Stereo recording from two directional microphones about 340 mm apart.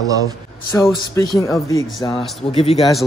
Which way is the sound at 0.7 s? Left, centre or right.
Centre.